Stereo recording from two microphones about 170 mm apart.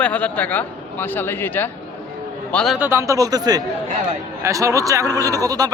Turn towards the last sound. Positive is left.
turn(degrees=-20)  # may be behind; listen again after turning